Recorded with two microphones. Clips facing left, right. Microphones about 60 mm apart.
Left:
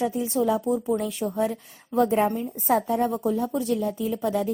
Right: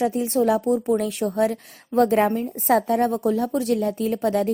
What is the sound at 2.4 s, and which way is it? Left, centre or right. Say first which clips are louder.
A woman's voice: right 3 dB; right.